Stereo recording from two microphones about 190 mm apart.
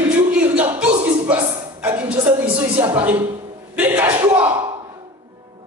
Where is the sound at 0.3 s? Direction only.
5° right (ahead or behind).